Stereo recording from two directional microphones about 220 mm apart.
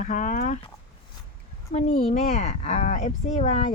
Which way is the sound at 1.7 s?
30° left (ahead or behind).